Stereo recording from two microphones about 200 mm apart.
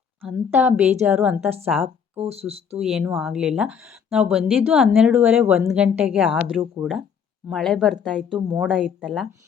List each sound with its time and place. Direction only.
0.2 s a woman's voice: 5° right (ahead or behind)
2.1 s speech: 30° right (ahead or behind)
2.7 s speech: 5° right (ahead or behind)